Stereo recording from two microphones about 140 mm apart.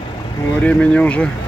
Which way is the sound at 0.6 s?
10° left (ahead or behind).